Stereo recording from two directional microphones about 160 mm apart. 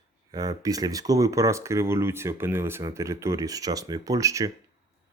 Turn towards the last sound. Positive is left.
turn(degrees=-20)  # may be behind; listen again after turning